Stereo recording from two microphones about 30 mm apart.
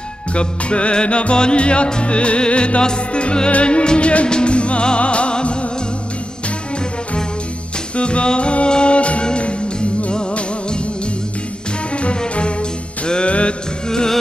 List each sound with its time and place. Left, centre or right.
0.3 s music: left
7.9 s music: left
11.9 s music: left
13.8 s music: left